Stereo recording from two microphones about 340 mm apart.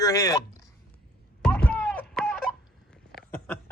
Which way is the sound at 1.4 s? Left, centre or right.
Centre.